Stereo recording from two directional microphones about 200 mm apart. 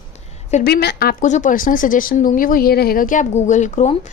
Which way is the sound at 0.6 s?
50° left (ahead or behind).